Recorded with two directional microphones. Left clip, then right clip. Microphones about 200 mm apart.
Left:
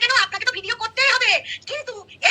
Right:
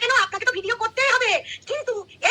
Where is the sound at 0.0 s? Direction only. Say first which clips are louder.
Left 1 dB; 40° right (ahead or behind).